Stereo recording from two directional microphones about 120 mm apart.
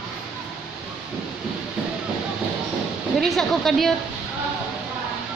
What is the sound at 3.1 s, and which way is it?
Speech, centre (ahead or behind).